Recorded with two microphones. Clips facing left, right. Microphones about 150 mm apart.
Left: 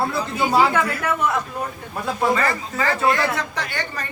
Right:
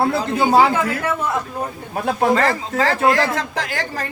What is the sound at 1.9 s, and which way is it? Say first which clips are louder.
A man's voice: right 4 dB; 55° right (ahead or behind).